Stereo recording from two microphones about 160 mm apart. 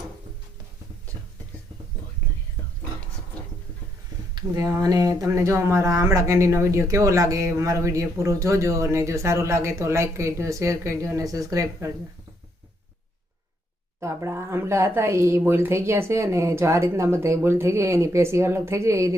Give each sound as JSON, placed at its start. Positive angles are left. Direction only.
{"t": 4.4, "sound": "speech", "side_deg": -20}
{"t": 14.0, "sound": "speech", "side_deg": -20}